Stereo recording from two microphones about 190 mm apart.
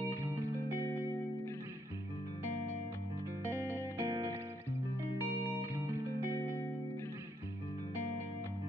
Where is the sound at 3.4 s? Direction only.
10° left (ahead or behind).